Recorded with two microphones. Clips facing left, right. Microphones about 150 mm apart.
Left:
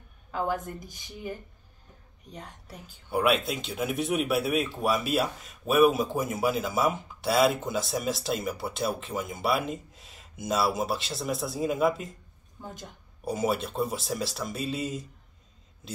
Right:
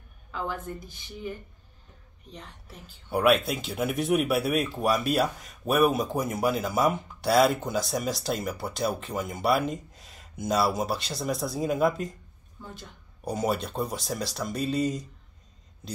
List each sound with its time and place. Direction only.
0.3 s a woman's voice: 45° left (ahead or behind)
2.3 s a woman's voice: 40° left (ahead or behind)
3.1 s speech: centre (ahead or behind)
13.2 s speech: 5° left (ahead or behind)